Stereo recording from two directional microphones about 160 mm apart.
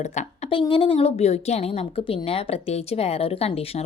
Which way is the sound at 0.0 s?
45° left (ahead or behind).